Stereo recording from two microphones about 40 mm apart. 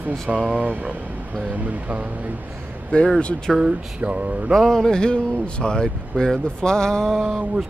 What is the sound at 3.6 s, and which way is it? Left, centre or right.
Mantra, right.